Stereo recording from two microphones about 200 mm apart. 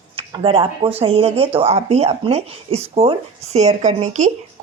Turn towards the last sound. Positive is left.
turn(degrees=-35)  # may be behind; listen again after turning